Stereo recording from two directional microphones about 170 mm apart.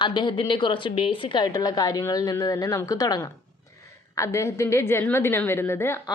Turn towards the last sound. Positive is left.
turn(degrees=15)  # may be behind; listen again after turning